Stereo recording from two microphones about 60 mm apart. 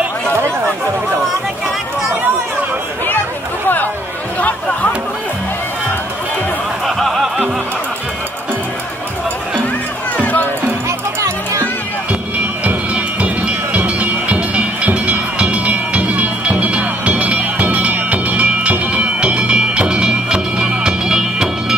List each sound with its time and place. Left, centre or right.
3.6 s chatter: left
7.0 s music: centre
10.1 s music: left
11.1 s music: right
12.6 s music: right